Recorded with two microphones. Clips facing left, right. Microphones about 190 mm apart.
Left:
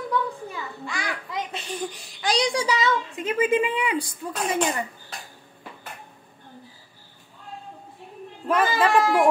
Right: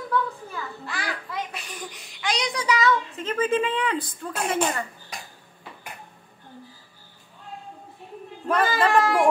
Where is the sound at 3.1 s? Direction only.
15° left (ahead or behind).